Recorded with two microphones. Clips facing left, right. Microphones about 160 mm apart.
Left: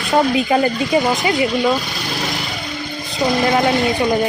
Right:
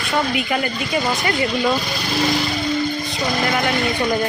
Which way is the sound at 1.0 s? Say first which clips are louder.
Left 2 dB; 15° left (ahead or behind).